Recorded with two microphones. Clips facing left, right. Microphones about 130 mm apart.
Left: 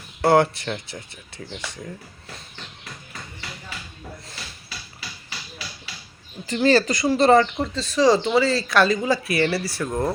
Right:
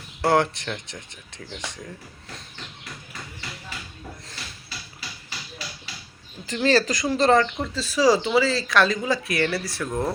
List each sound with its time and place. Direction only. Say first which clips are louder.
0.2 s speech: left 3 dB; 5° left (ahead or behind)
6.5 s speech: left 2 dB; centre (ahead or behind)